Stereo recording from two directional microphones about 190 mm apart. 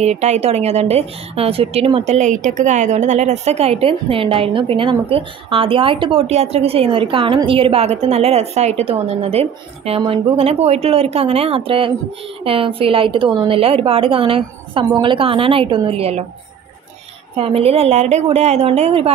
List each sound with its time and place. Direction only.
0.0 s a woman's voice: 35° right (ahead or behind)
17.4 s a woman's voice: 30° right (ahead or behind)